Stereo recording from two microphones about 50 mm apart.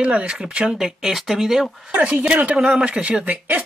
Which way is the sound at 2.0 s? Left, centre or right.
Right.